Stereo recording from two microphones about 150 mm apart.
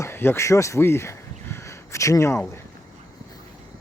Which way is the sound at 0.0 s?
15° left (ahead or behind).